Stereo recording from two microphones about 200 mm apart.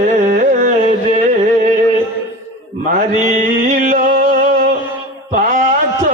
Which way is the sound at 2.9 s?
40° right (ahead or behind).